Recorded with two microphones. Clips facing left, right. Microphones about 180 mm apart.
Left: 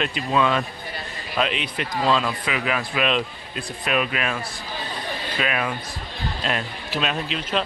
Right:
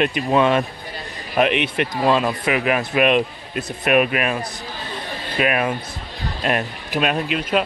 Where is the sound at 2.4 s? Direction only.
55° right (ahead or behind).